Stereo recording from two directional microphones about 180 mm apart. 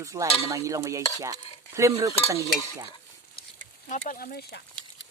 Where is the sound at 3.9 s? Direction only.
45° left (ahead or behind).